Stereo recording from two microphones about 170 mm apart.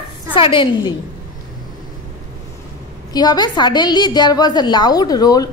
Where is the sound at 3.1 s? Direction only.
25° left (ahead or behind).